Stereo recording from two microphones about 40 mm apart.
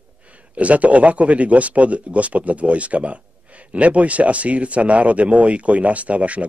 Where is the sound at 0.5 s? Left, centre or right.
Right.